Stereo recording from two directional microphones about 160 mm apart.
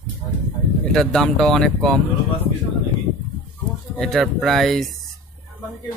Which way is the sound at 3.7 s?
Centre (ahead or behind).